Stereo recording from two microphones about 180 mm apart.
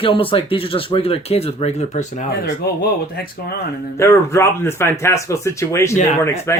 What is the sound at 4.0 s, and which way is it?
Speech, 15° left (ahead or behind).